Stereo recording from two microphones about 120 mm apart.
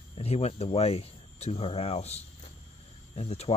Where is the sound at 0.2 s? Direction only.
60° left (ahead or behind).